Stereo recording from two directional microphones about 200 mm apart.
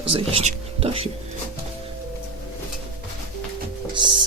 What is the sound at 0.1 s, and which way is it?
Speech, 30° right (ahead or behind).